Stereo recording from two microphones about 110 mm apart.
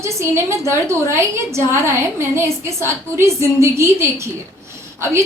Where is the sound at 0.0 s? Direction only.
25° right (ahead or behind).